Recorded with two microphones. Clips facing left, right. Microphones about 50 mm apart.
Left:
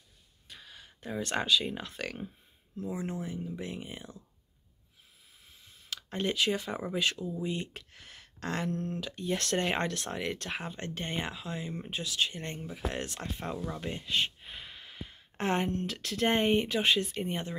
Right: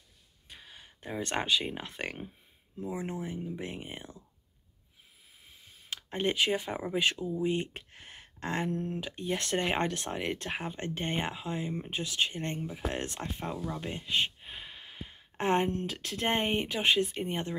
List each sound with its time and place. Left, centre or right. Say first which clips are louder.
0.5 s speech: even; right
5.5 s a sound: right 1 dB; right
6.2 s speech: right 1 dB; right